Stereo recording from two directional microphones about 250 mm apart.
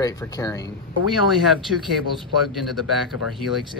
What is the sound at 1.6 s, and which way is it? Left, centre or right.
Speech, centre.